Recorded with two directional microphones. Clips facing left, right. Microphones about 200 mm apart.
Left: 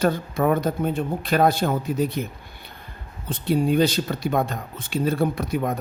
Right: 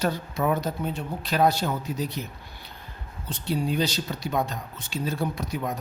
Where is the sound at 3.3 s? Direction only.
55° left (ahead or behind).